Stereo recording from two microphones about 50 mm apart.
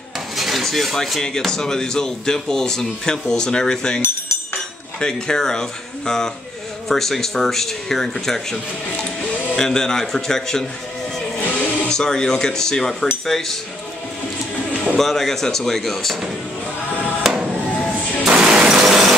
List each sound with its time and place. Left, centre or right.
0.4 s dishes: centre
1.2 s speech: centre
5.0 s speech: centre
9.6 s speech: centre
11.4 s a sound: left
11.9 s speech: centre
15.0 s speech: centre
17.2 s music: centre
18.2 s a sound: centre
18.9 s a sound: centre